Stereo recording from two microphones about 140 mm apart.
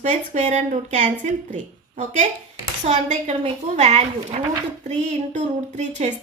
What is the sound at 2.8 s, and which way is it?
A woman's voice, 50° right (ahead or behind).